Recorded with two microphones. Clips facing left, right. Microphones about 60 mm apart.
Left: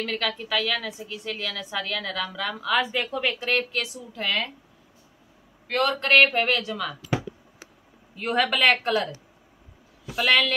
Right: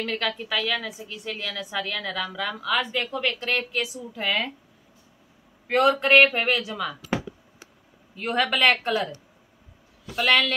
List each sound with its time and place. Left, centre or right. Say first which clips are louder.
0.0 s a woman's voice: even; centre
5.7 s speech: right 4 dB; centre
5.9 s speech: right 1 dB; centre
8.2 s a woman's voice: even; centre